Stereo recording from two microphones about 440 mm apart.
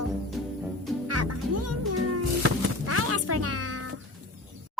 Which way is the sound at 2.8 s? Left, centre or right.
Right.